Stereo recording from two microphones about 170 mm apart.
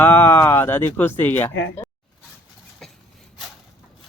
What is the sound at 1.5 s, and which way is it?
Speech, 90° left.